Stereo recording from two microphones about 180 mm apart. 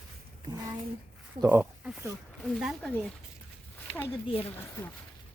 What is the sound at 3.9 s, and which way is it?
Speech, 10° left (ahead or behind).